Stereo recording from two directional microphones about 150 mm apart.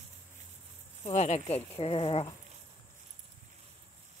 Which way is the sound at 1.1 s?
50° left (ahead or behind).